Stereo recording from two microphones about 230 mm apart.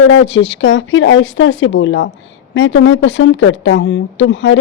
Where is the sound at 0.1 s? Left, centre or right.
Left.